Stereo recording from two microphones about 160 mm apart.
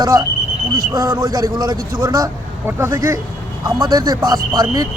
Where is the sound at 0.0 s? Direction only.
20° right (ahead or behind).